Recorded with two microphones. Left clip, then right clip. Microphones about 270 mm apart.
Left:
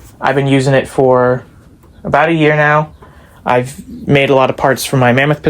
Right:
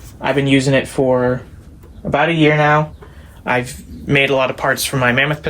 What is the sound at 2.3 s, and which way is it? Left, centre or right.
Speech, left.